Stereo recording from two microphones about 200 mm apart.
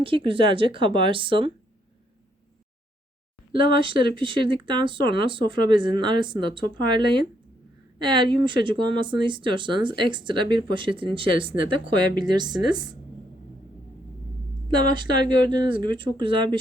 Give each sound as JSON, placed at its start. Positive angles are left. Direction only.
{"t": 0.0, "sound": "speech", "side_deg": -25}
{"t": 3.5, "sound": "speech", "side_deg": -25}
{"t": 14.7, "sound": "speech", "side_deg": -20}